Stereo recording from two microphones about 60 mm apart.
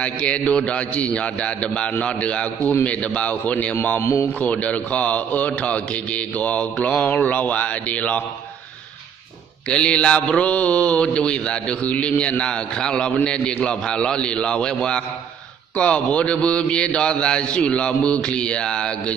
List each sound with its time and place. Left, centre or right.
0.0 s speech: left
4.0 s a man's voice: left
4.4 s speech: left
9.7 s a man's voice: centre